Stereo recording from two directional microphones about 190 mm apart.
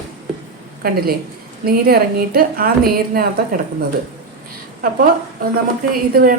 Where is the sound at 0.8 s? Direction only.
50° right (ahead or behind).